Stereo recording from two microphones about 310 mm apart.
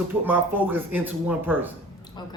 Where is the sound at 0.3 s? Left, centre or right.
Centre.